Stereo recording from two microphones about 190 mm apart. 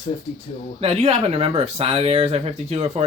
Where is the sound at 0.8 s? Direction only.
30° right (ahead or behind).